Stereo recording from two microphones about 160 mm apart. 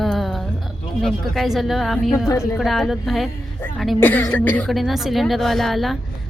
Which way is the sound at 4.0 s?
10° left (ahead or behind).